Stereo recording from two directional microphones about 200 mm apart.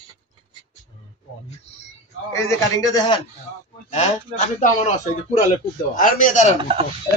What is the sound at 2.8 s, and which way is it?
Speech, 20° left (ahead or behind).